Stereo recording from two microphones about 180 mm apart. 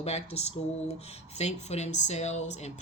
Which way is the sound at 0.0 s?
35° left (ahead or behind).